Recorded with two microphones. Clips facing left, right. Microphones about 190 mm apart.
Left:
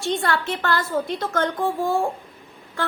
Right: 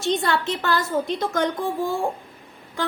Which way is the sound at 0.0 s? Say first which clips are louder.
Right 1 dB; 20° right (ahead or behind).